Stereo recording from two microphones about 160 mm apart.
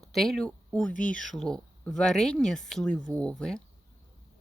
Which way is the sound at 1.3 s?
5° left (ahead or behind).